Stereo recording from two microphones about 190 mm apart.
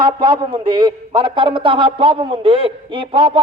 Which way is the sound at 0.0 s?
25° right (ahead or behind).